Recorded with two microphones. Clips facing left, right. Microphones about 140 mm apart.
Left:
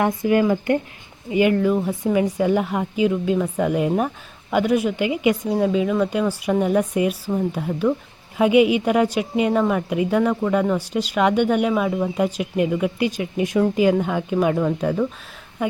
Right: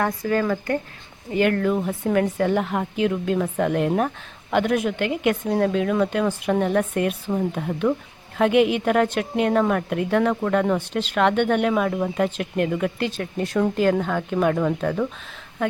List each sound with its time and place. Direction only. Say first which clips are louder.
0.0 s a woman's voice: left 4 dB; 15° left (ahead or behind)